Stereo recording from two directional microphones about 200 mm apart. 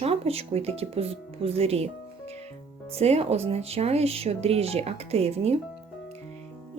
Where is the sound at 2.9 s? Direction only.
30° right (ahead or behind).